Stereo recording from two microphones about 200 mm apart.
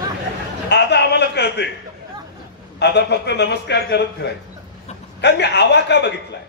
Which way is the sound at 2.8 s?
55° left (ahead or behind).